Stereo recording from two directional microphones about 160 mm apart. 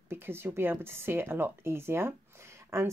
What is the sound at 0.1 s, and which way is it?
Speech, 15° right (ahead or behind).